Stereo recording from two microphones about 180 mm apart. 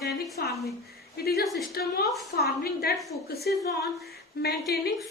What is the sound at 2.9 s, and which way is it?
A woman's voice, 60° left (ahead or behind).